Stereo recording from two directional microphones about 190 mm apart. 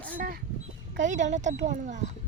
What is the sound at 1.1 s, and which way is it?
Speech, 40° right (ahead or behind).